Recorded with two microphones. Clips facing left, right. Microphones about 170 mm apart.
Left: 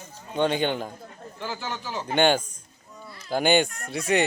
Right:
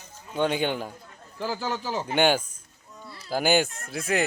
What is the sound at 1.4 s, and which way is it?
Speech, 35° right (ahead or behind).